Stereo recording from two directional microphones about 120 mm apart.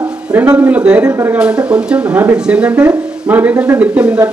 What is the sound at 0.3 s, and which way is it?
Speech, 20° right (ahead or behind).